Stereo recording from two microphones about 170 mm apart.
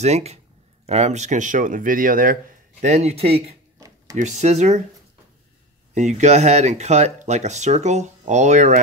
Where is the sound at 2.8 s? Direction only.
40° right (ahead or behind).